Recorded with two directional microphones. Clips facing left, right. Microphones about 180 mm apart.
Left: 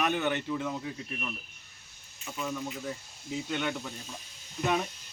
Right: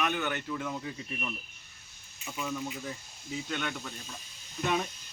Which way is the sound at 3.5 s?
15° left (ahead or behind).